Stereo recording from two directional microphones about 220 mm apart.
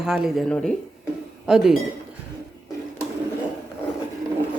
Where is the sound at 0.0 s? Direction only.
Centre (ahead or behind).